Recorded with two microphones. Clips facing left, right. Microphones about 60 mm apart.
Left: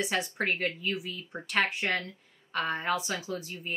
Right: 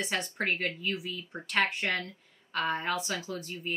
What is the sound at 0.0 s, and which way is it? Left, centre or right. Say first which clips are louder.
Speech: left 2 dB; centre.